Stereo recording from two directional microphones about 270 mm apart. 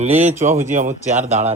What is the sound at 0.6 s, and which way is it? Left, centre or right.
Speech, right.